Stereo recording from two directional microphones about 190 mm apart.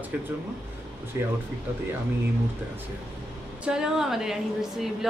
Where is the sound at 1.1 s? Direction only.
10° right (ahead or behind).